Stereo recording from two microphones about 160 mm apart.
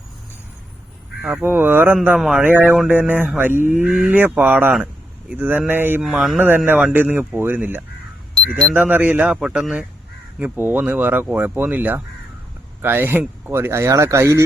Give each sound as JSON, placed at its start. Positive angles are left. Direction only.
{"t": 1.2, "sound": "mantra", "side_deg": -10}
{"t": 2.0, "sound": "mantra", "side_deg": 0}
{"t": 6.1, "sound": "speech", "side_deg": 0}
{"t": 6.3, "sound": "mantra", "side_deg": -10}